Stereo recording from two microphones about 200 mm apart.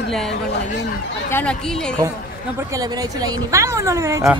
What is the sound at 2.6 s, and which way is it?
A woman's voice, 15° right (ahead or behind).